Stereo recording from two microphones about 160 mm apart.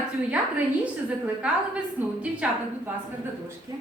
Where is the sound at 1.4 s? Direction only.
10° right (ahead or behind).